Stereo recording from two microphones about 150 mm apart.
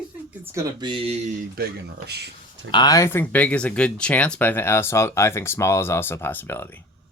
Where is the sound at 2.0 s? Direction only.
90° right.